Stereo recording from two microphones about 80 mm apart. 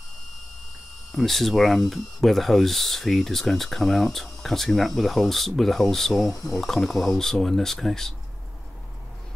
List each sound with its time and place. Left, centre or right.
1.1 s speech: centre
6.3 s speech: left
6.6 s speech: centre